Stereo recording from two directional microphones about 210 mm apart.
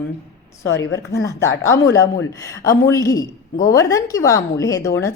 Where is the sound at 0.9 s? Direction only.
55° left (ahead or behind).